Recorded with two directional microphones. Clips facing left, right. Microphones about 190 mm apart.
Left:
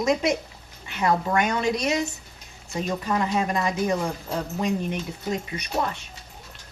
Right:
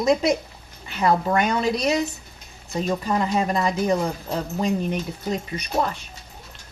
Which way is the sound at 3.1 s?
30° right (ahead or behind).